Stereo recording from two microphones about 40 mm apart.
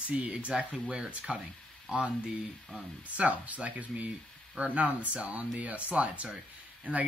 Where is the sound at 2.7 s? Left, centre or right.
Right.